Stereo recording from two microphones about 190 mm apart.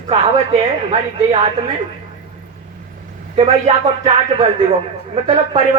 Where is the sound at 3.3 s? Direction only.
35° right (ahead or behind).